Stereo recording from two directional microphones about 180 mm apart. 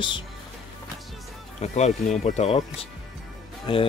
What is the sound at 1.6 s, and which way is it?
Speech, 40° left (ahead or behind).